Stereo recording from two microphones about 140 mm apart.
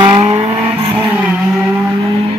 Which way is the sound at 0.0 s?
40° right (ahead or behind).